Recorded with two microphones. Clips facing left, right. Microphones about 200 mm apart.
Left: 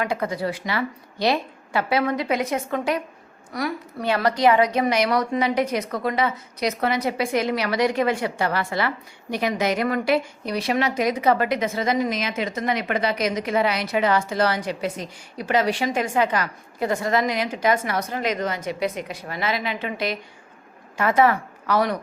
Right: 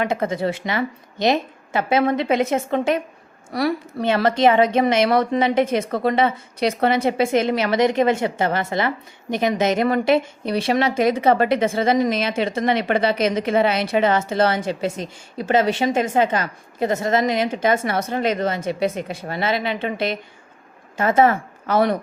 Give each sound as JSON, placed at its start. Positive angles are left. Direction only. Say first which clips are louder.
{"t": 0.0, "sound": "a woman's voice", "louder": "right 3 dB", "side_deg": -25}